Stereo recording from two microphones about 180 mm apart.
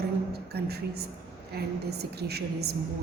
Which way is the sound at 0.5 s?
60° right (ahead or behind).